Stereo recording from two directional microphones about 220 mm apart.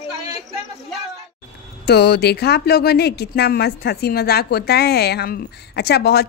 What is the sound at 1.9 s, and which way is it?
Speech, 45° left (ahead or behind).